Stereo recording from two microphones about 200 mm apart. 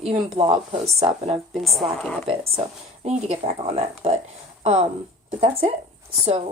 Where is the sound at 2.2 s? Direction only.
30° right (ahead or behind).